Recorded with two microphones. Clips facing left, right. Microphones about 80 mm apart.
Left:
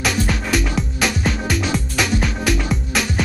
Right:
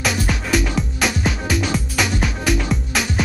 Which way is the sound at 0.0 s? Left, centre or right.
Centre.